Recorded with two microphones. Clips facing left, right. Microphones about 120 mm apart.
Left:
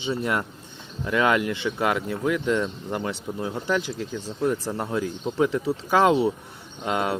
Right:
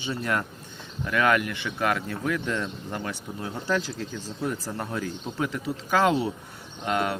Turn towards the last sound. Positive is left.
turn(degrees=20)  # may be behind; listen again after turning